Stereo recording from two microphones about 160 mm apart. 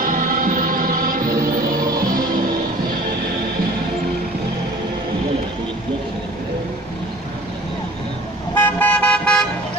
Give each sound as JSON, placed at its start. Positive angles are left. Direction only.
{"t": 0.0, "sound": "music", "side_deg": -60}
{"t": 8.5, "sound": "vehicle", "side_deg": 10}